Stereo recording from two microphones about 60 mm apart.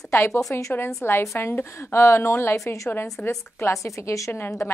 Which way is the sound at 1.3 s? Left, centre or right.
Left.